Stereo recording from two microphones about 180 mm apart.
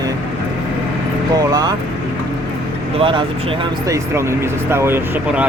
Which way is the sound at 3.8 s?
15° right (ahead or behind).